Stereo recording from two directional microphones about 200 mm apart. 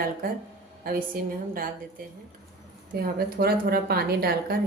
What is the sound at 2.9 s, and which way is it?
A woman's voice, 50° right (ahead or behind).